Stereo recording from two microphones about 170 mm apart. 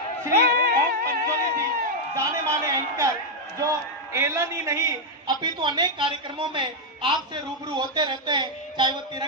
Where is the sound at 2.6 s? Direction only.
20° right (ahead or behind).